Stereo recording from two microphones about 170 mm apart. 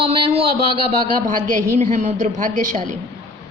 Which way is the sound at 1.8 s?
45° right (ahead or behind).